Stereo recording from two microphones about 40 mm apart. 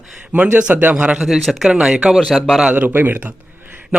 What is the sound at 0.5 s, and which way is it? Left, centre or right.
Speech, right.